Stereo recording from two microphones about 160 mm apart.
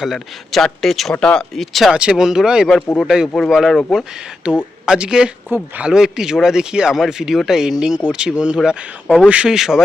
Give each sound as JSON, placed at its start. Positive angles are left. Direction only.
{"t": 0.0, "sound": "speech", "side_deg": 0}
{"t": 2.8, "sound": "speech", "side_deg": 10}
{"t": 3.1, "sound": "speech", "side_deg": 0}
{"t": 9.0, "sound": "speech", "side_deg": 5}
{"t": 9.3, "sound": "speech", "side_deg": -5}